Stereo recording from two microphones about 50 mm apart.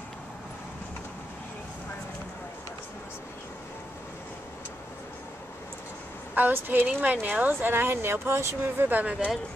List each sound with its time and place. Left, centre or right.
6.3 s speech: right
7.0 s speech: right
7.7 s speech: right
9.0 s speech: right